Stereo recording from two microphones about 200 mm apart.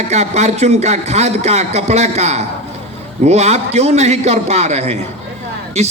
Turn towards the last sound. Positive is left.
turn(degrees=-35)  # may be behind; listen again after turning